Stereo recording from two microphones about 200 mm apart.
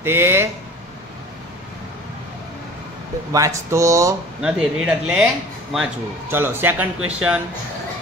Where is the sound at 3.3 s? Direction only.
15° right (ahead or behind).